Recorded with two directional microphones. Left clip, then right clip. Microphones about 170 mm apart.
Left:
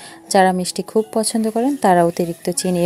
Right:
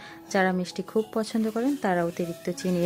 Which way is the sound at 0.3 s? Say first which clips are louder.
Left 11 dB; 35° left (ahead or behind).